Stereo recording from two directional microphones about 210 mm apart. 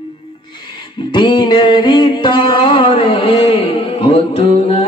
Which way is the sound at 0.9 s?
20° left (ahead or behind).